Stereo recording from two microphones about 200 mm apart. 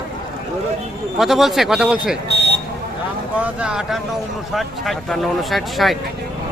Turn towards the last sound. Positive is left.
turn(degrees=0)  # may be behind; listen again after turning